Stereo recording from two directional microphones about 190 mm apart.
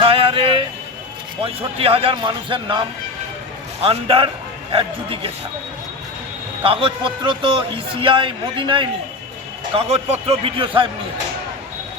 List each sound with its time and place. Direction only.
0.0 s a sound: 30° right (ahead or behind)
1.4 s a man's voice: 30° right (ahead or behind)
3.8 s a man's voice: 25° right (ahead or behind)
6.6 s a man's voice: 30° right (ahead or behind)